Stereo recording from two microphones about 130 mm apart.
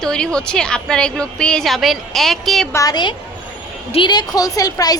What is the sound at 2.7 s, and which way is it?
A woman's voice, 30° left (ahead or behind).